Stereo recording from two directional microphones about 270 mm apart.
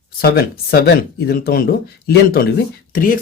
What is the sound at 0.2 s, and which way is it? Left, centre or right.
Speech, left.